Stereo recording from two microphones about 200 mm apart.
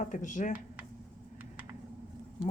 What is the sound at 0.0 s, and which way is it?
Speech, 40° left (ahead or behind).